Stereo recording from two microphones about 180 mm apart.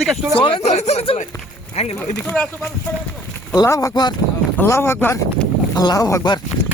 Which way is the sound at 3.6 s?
20° left (ahead or behind).